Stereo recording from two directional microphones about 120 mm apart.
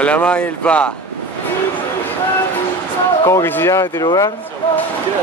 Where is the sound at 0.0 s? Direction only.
10° left (ahead or behind).